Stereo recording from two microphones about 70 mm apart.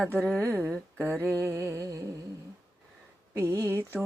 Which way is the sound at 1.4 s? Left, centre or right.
Right.